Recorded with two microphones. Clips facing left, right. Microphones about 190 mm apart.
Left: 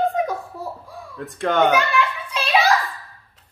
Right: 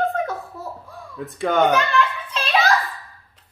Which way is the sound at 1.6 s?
10° left (ahead or behind).